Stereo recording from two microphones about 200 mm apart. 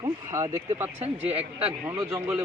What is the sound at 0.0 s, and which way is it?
Speech, 15° right (ahead or behind).